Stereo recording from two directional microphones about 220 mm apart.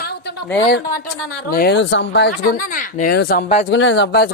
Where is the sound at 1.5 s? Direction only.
45° left (ahead or behind).